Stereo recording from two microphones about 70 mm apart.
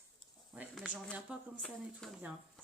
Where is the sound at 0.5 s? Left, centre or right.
Centre.